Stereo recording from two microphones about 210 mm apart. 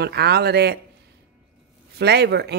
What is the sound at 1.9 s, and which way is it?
Speech, 50° right (ahead or behind).